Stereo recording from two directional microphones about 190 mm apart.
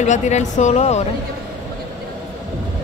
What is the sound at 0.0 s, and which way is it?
Speech, 40° left (ahead or behind).